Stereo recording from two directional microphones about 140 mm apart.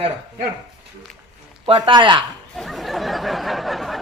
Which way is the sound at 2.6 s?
Centre (ahead or behind).